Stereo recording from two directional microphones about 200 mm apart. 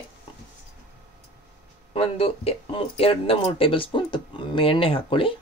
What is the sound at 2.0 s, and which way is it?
Speech, 30° left (ahead or behind).